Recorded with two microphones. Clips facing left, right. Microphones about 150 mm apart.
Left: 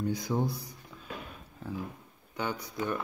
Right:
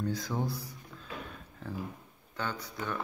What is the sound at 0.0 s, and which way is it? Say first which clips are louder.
Speech: left 3 dB; 15° left (ahead or behind).